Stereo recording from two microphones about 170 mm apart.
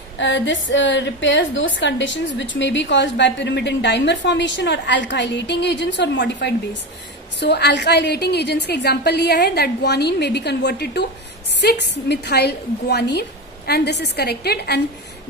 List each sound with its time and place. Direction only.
0.2 s a woman's voice: 90° left; by 14.8 s 70° left (ahead or behind)